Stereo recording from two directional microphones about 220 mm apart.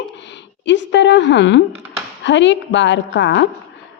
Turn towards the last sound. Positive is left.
turn(degrees=55)  # may be behind; listen again after turning